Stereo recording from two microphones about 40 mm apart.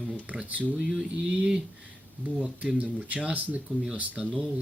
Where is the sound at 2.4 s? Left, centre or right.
Right.